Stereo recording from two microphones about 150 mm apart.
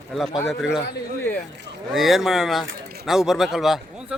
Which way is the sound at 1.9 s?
Centre (ahead or behind).